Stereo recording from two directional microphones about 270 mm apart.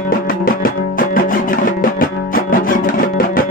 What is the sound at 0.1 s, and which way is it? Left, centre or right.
Music, left.